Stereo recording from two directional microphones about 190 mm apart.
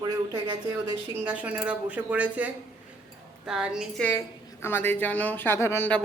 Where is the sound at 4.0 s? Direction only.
10° left (ahead or behind).